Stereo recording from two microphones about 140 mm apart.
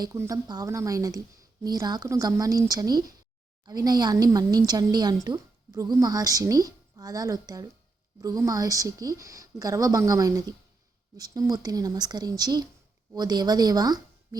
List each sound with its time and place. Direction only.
0.0 s a woman's voice: 20° right (ahead or behind)